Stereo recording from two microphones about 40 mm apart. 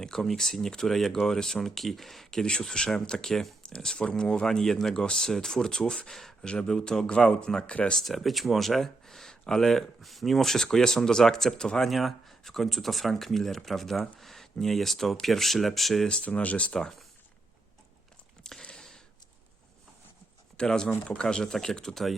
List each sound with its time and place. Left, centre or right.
0.0 s speech: centre
2.3 s speech: centre
4.9 s speech: left
5.2 s speech: centre
6.4 s speech: centre
7.7 s speech: left
7.9 s speech: centre
11.9 s speech: centre
16.2 s speech: left
18.5 s a sound: centre
20.6 s speech: centre